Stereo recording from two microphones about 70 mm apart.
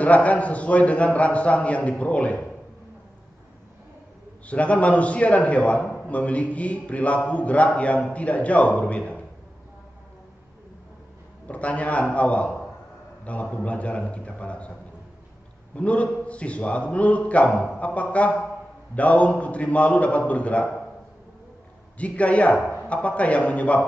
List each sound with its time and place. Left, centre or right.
0.0 s speech: left
4.5 s speech: centre
11.4 s speech: centre
15.7 s a man's voice: centre
21.9 s speech: centre